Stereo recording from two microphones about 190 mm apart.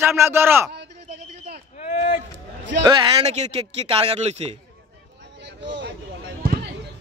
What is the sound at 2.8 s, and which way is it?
Speech, 30° right (ahead or behind).